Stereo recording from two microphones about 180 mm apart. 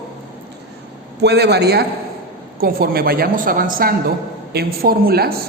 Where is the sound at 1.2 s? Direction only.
65° right (ahead or behind).